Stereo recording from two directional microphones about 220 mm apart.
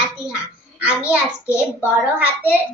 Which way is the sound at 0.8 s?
5° right (ahead or behind).